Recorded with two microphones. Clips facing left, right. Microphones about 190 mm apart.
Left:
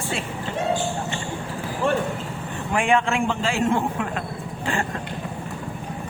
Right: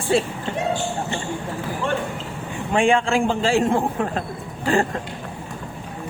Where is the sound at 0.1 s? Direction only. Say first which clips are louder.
Right 15 dB; 35° right (ahead or behind).